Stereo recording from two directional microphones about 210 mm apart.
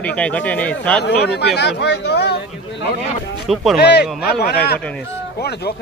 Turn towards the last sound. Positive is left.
turn(degrees=50)  # may be behind; listen again after turning